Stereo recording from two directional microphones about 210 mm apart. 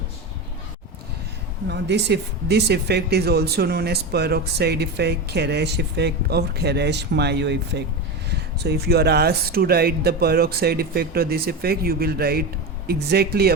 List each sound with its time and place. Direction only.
1.7 s speech: 55° right (ahead or behind)